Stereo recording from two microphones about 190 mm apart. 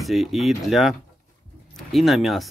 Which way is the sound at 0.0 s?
Centre (ahead or behind).